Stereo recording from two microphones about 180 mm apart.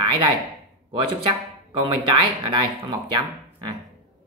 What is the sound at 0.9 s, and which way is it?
Speech, 30° right (ahead or behind).